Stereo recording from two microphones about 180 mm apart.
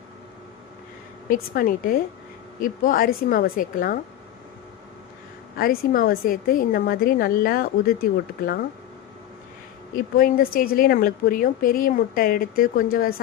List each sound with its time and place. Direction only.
1.3 s a woman's voice: 50° left (ahead or behind)
5.5 s a woman's voice: 50° left (ahead or behind)
9.9 s a woman's voice: 50° left (ahead or behind)